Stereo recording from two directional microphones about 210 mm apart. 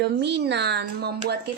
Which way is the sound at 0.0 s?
55° right (ahead or behind).